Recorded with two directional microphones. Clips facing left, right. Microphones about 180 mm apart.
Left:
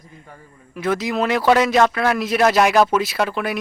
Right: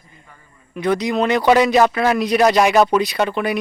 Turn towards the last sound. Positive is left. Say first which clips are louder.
# right 2 dB
turn(degrees=0)  # may be behind; listen again after turning